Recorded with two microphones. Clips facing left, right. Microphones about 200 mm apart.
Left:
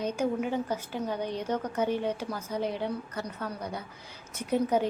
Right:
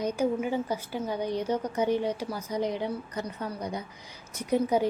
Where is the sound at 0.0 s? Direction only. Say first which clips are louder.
Right 2 dB; 10° right (ahead or behind).